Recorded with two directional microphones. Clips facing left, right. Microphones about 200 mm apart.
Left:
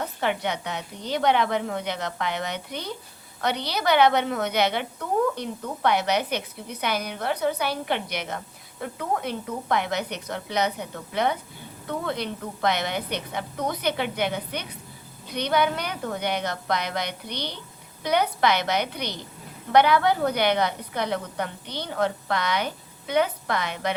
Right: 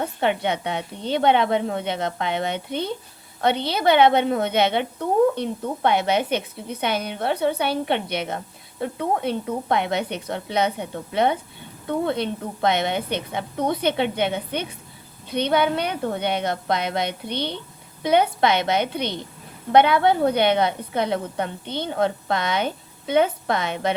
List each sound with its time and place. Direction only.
0.0 s a woman's voice: 25° right (ahead or behind)